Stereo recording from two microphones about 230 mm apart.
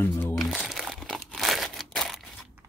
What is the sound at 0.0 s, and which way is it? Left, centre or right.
Crumpling, centre.